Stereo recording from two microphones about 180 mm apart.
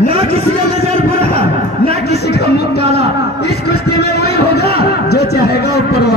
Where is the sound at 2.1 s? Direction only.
65° left (ahead or behind).